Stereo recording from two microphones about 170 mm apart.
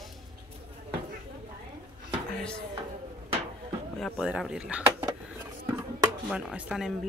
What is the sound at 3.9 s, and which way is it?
Speech, centre (ahead or behind).